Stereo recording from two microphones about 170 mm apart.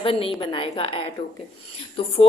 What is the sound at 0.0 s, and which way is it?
A woman's voice, 30° left (ahead or behind).